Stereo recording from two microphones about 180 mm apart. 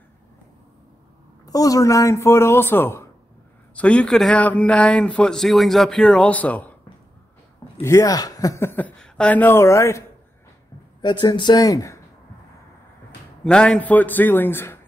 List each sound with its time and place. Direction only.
1.4 s a man's voice: 20° left (ahead or behind)
7.8 s speech: 20° left (ahead or behind)
13.4 s speech: 5° left (ahead or behind)